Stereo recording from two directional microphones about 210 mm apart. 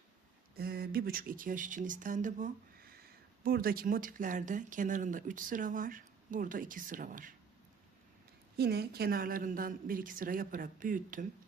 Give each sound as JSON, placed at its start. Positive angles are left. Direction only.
{"t": 0.5, "sound": "speech", "side_deg": -45}
{"t": 8.5, "sound": "speech", "side_deg": -50}